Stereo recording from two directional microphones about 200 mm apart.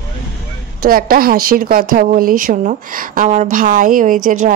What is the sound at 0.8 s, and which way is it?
A woman's voice, 45° right (ahead or behind).